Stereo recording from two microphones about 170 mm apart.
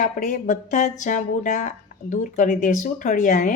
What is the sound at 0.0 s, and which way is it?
Speech, 50° left (ahead or behind).